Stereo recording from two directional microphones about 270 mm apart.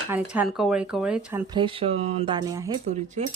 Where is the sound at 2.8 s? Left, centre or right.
Right.